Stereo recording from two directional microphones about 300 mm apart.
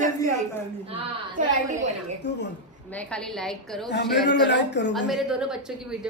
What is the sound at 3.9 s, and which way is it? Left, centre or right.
Speech, left.